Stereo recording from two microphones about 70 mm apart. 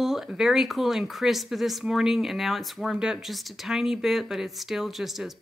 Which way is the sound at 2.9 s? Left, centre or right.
Centre.